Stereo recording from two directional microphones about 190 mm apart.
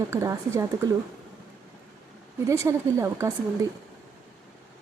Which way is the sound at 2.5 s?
15° right (ahead or behind).